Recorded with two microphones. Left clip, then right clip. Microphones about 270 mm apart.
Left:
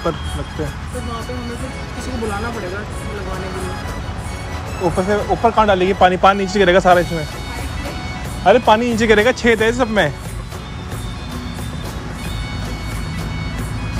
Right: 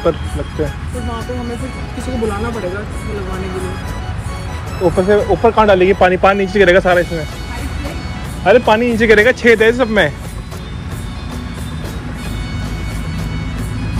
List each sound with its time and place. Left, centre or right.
4.8 s speech: centre
8.5 s speech: centre